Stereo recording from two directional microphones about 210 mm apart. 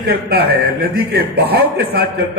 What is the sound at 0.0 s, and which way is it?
A man's voice, 50° right (ahead or behind).